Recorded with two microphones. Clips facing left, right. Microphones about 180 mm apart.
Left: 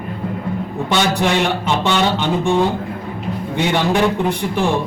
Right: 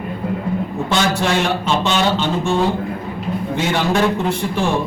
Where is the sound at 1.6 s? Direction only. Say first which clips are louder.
Even; 15° left (ahead or behind).